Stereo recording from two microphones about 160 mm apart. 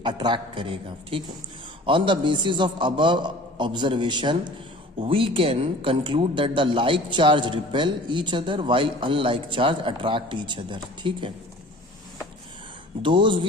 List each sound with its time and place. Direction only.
0.0 s a man's voice: 30° right (ahead or behind)
13.0 s speech: 30° right (ahead or behind)